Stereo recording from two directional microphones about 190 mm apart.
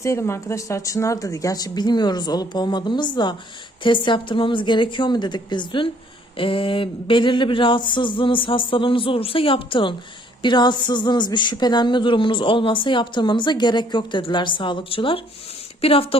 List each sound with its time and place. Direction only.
0.0 s speech: 15° left (ahead or behind); by 16.0 s 30° left (ahead or behind)